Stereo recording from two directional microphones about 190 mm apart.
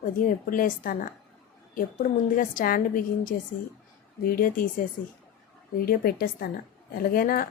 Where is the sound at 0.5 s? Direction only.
45° left (ahead or behind).